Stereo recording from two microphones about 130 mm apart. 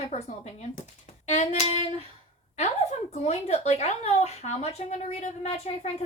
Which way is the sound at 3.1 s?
60° left (ahead or behind).